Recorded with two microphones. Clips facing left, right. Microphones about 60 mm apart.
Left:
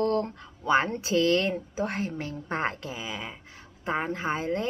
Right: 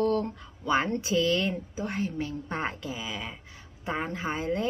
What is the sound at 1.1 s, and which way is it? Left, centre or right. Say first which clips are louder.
Speech: left 4 dB; left.